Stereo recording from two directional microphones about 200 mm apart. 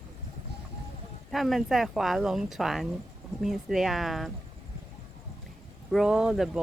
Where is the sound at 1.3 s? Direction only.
Centre (ahead or behind).